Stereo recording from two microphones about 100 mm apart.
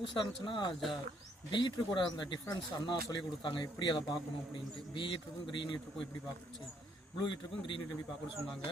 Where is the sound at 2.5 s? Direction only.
35° left (ahead or behind).